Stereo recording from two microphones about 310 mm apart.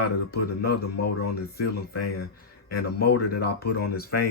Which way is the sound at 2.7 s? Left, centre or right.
Left.